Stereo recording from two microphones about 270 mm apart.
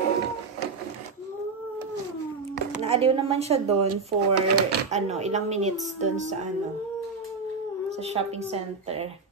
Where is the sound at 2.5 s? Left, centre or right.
Right.